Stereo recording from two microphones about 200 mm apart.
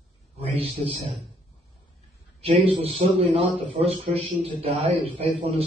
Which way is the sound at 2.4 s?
30° right (ahead or behind).